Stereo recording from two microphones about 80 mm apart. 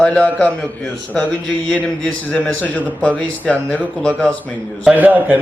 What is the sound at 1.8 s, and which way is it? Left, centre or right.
A man's voice, centre.